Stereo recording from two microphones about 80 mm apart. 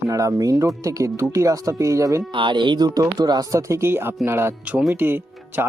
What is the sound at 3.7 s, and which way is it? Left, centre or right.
Speech, right.